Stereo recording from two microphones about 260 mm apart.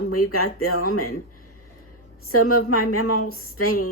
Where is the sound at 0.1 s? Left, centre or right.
Left.